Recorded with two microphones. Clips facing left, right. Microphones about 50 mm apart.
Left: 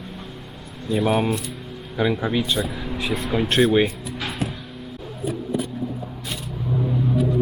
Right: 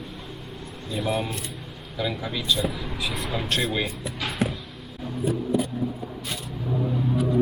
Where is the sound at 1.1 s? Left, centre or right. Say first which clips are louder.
Left 6 dB; left.